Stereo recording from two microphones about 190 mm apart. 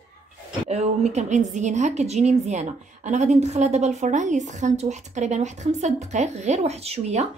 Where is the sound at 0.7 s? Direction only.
35° right (ahead or behind).